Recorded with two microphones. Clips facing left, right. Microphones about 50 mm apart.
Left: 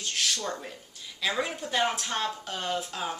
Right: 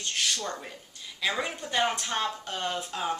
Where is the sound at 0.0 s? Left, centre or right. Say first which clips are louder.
Even; centre.